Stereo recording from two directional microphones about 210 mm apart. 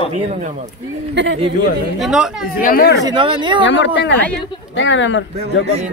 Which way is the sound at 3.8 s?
55° left (ahead or behind).